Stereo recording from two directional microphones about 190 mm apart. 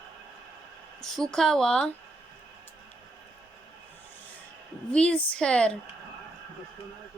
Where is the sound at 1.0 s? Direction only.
Centre (ahead or behind).